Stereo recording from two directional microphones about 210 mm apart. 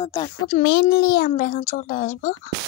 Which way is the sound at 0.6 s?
50° left (ahead or behind).